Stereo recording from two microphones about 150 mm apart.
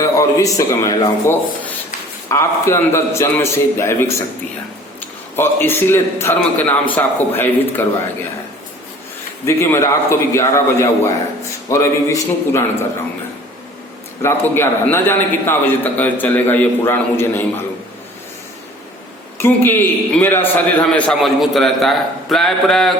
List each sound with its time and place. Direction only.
0.0 s a man's voice: 20° left (ahead or behind)
5.4 s a man's voice: 15° left (ahead or behind)
9.5 s a man's voice: 20° left (ahead or behind)
14.2 s a man's voice: 15° left (ahead or behind)
19.4 s a man's voice: 15° left (ahead or behind)